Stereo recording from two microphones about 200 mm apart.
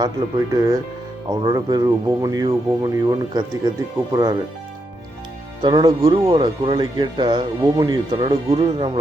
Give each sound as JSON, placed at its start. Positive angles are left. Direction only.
{"t": 0.0, "sound": "speech", "side_deg": -20}
{"t": 5.6, "sound": "speech", "side_deg": -20}